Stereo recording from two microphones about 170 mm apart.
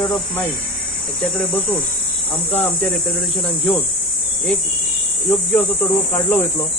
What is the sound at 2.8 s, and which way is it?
Speech, 5° left (ahead or behind).